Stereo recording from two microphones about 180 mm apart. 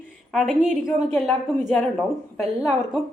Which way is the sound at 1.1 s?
5° left (ahead or behind).